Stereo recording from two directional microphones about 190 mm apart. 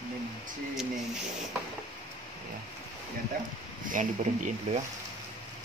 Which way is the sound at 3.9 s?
40° right (ahead or behind).